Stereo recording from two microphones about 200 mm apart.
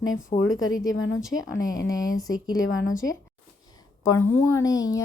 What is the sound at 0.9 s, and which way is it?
Speech, 70° left (ahead or behind).